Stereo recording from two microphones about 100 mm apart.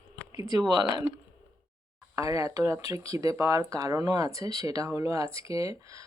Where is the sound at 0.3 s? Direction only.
40° right (ahead or behind).